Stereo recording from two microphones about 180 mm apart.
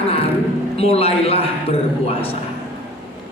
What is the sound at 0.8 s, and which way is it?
Speech, 35° left (ahead or behind).